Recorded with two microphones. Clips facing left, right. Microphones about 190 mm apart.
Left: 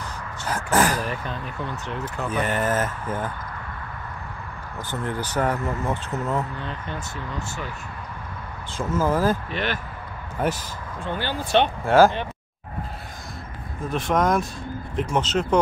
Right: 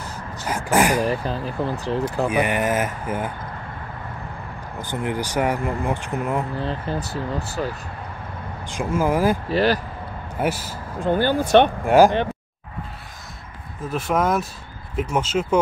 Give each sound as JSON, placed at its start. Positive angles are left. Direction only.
{"t": 0.5, "sound": "speech", "side_deg": -10}
{"t": 1.0, "sound": "speech", "side_deg": -35}
{"t": 2.2, "sound": "speech", "side_deg": -10}
{"t": 4.8, "sound": "speech", "side_deg": -15}
{"t": 6.5, "sound": "speech", "side_deg": -35}
{"t": 8.6, "sound": "speech", "side_deg": -15}
{"t": 9.5, "sound": "speech", "side_deg": -35}
{"t": 10.4, "sound": "speech", "side_deg": -10}
{"t": 11.0, "sound": "speech", "side_deg": -45}
{"t": 11.8, "sound": "speech", "side_deg": -15}
{"t": 13.8, "sound": "speech", "side_deg": -5}